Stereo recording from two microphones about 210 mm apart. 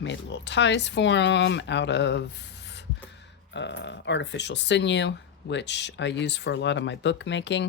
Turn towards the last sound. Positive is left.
turn(degrees=60)  # may be behind; listen again after turning